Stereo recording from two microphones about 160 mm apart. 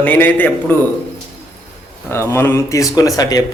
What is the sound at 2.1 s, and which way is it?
Speech, 15° left (ahead or behind).